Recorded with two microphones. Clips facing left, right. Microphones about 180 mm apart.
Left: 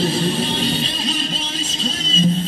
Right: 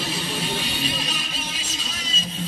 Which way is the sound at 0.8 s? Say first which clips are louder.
Left 5 dB; 25° left (ahead or behind).